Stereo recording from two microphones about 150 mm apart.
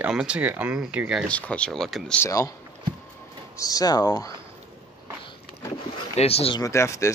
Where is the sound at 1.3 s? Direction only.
10° left (ahead or behind).